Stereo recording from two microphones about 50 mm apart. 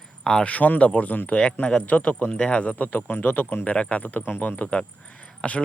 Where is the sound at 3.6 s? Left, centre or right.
Left.